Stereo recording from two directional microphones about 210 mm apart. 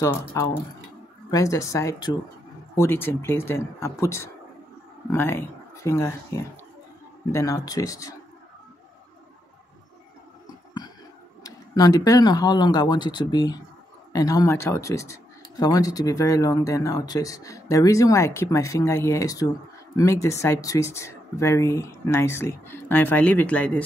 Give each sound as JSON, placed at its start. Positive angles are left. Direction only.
{"t": 0.0, "sound": "speech", "side_deg": 15}
{"t": 11.4, "sound": "speech", "side_deg": 15}